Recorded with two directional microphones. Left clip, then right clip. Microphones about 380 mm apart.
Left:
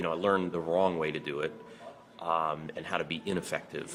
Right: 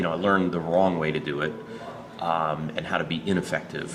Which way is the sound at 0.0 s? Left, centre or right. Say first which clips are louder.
Right 5 dB; left.